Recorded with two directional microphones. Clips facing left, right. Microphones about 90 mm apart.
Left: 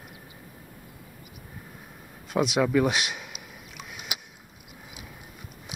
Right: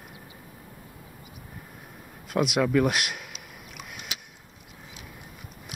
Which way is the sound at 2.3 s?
Centre (ahead or behind).